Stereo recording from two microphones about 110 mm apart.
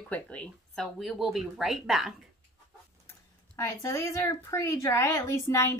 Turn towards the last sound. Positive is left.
turn(degrees=25)  # may be behind; listen again after turning